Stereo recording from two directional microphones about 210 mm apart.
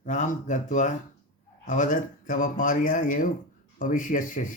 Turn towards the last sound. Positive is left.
turn(degrees=40)  # may be behind; listen again after turning